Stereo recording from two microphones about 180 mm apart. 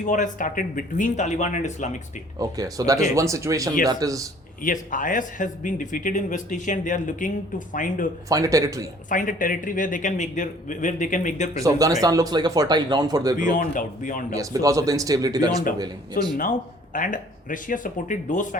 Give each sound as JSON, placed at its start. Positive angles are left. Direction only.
{"t": 0.0, "sound": "a man's voice", "side_deg": 45}
{"t": 2.4, "sound": "speech", "side_deg": -20}
{"t": 4.6, "sound": "a man's voice", "side_deg": 45}
{"t": 8.3, "sound": "speech", "side_deg": -20}
{"t": 9.0, "sound": "a man's voice", "side_deg": 50}
{"t": 11.5, "sound": "speech", "side_deg": -20}
{"t": 13.5, "sound": "a man's voice", "side_deg": 45}
{"t": 14.3, "sound": "speech", "side_deg": -20}
{"t": 16.1, "sound": "a man's voice", "side_deg": 50}